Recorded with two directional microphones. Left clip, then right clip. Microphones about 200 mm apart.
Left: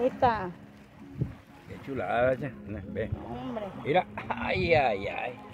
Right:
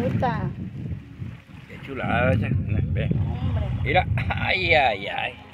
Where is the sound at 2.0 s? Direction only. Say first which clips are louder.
Right 3 dB; 25° left (ahead or behind).